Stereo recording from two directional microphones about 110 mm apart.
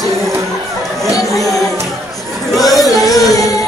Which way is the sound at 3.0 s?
30° left (ahead or behind).